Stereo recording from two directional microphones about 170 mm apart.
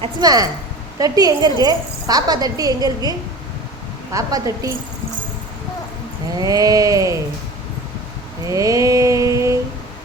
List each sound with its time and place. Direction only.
0.0 s a woman's voice: 20° right (ahead or behind)
6.3 s a woman's voice: 20° right (ahead or behind)
8.4 s mantra: 20° right (ahead or behind)